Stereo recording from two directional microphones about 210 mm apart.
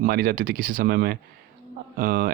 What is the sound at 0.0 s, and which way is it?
Speech, 45° right (ahead or behind).